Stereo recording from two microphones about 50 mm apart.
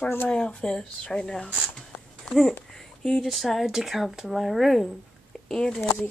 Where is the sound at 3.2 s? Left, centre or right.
Centre.